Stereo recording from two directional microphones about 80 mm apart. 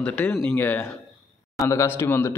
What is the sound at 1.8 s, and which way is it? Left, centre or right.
Speech, left.